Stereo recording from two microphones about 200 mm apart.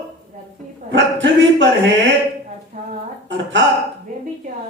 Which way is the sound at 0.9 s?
60° right (ahead or behind).